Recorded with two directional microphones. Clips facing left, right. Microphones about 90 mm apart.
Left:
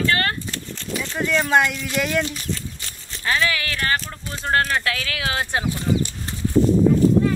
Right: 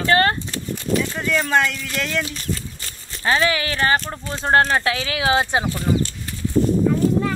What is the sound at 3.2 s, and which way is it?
Speech, 30° right (ahead or behind).